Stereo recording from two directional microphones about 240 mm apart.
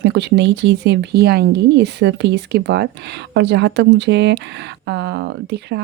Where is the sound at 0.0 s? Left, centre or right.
Right.